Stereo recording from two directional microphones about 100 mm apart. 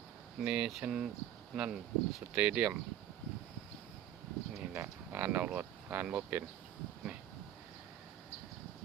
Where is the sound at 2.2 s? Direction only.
10° right (ahead or behind).